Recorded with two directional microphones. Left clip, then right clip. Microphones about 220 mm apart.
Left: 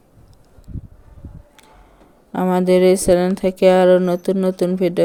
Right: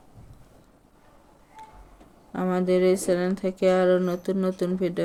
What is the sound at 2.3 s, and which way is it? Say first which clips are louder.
Speech: left 8 dB; 35° left (ahead or behind).